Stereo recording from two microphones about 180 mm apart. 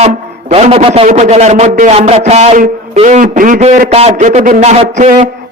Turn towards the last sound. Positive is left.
turn(degrees=-35)  # may be behind; listen again after turning